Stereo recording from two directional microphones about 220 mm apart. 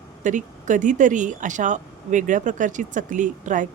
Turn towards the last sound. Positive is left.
turn(degrees=-35)  # may be behind; listen again after turning